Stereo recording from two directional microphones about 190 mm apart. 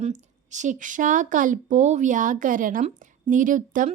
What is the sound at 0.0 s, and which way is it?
A woman's voice, 40° right (ahead or behind).